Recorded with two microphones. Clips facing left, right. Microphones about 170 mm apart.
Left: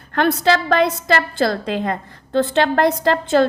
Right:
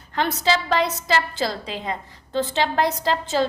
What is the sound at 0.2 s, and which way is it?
A woman's voice, 55° left (ahead or behind).